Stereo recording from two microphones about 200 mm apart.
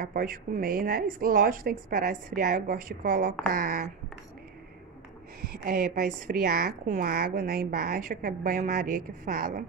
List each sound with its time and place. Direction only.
0.0 s a woman's voice: 45° right (ahead or behind)
5.6 s a woman's voice: 40° right (ahead or behind)